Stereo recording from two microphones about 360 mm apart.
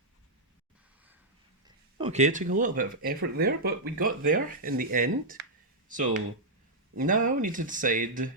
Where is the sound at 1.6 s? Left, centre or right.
Centre.